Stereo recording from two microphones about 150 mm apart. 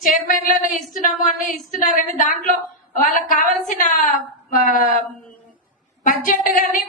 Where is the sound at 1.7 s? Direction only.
60° left (ahead or behind).